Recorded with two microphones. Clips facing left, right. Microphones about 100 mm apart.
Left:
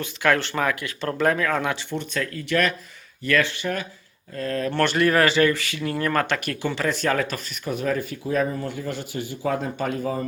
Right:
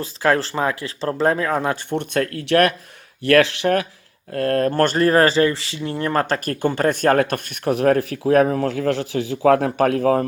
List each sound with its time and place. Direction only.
0.0 s speech: 35° right (ahead or behind)
1.7 s speech: 55° right (ahead or behind)
3.2 s speech: 80° right
4.3 s speech: 60° right (ahead or behind)
4.7 s a man's voice: 40° right (ahead or behind); by 10.2 s 70° right (ahead or behind)